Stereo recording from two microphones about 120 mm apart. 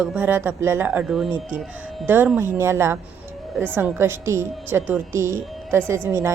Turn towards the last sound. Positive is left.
turn(degrees=-20)  # may be behind; listen again after turning